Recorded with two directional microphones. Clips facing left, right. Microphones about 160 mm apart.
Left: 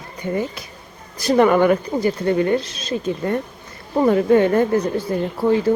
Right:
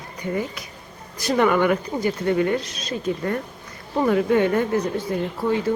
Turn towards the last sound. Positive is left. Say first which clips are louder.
# left 5 dB
turn(degrees=35)  # may be behind; listen again after turning